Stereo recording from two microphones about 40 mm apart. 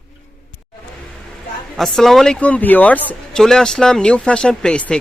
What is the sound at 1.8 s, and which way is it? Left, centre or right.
Speech, centre.